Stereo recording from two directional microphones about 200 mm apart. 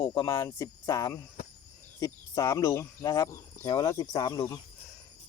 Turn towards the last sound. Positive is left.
turn(degrees=20)  # may be behind; listen again after turning